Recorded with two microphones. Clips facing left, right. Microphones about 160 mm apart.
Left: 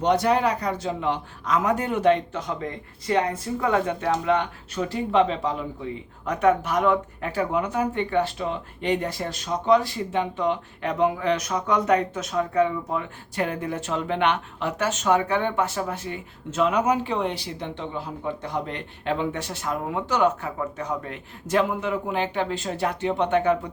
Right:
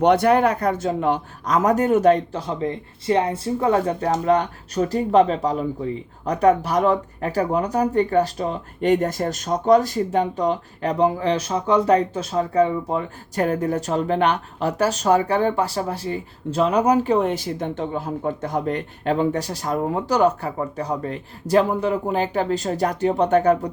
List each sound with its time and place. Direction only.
0.0 s a man's voice: 60° right (ahead or behind); by 23.7 s 40° right (ahead or behind)